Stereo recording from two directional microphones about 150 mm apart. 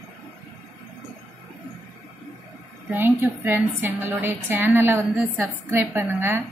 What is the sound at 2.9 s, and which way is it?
A woman's voice, 15° right (ahead or behind).